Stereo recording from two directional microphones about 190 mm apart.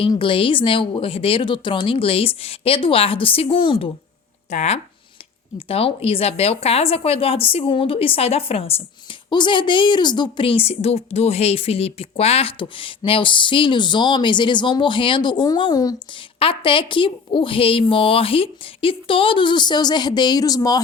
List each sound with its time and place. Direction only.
0.0 s a woman's voice: 25° left (ahead or behind)
4.4 s a woman's voice: 40° left (ahead or behind); by 20.8 s 20° left (ahead or behind)